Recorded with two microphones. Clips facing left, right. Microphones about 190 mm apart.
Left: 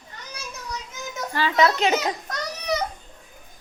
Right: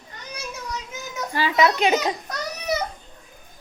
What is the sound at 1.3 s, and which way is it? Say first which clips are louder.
Speech: even; 15° right (ahead or behind).